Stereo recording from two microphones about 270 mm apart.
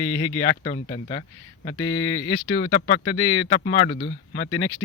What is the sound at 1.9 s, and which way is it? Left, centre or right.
Speech, left.